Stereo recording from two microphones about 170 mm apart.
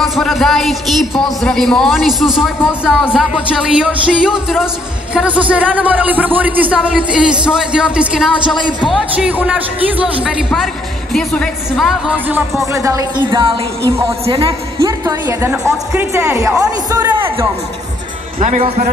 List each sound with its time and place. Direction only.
0.0 s a man's voice: centre (ahead or behind)
12.7 s a man's voice: 20° right (ahead or behind)
18.4 s a man's voice: 40° right (ahead or behind)